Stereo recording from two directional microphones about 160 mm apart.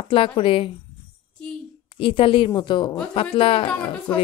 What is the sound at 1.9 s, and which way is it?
A woman's voice, 35° left (ahead or behind).